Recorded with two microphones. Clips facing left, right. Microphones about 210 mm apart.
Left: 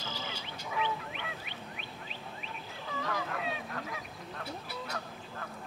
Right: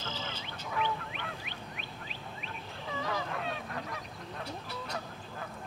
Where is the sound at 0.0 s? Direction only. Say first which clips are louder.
Right 1 dB; 10° left (ahead or behind).